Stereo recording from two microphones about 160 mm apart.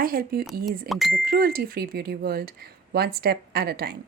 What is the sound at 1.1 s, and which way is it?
Speech, 65° right (ahead or behind).